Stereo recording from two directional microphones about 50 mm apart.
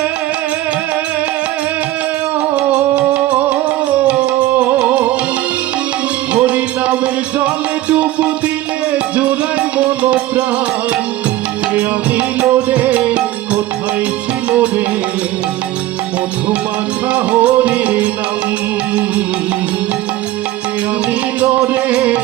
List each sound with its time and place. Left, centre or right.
2.6 s music: right
4.8 s music: right
6.3 s music: right
11.7 s music: right
17.1 s music: right
21.7 s music: right